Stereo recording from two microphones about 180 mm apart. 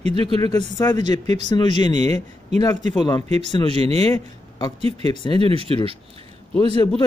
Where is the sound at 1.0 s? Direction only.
40° right (ahead or behind).